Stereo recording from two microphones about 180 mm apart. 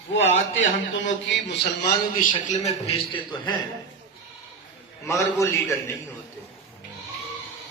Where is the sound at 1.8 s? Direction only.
50° left (ahead or behind).